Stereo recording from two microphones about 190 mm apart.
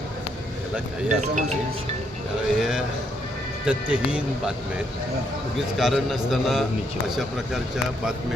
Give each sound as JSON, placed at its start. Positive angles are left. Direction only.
{"t": 1.2, "sound": "speech", "side_deg": -35}
{"t": 2.6, "sound": "a man's voice", "side_deg": -5}
{"t": 5.5, "sound": "a man's voice", "side_deg": 0}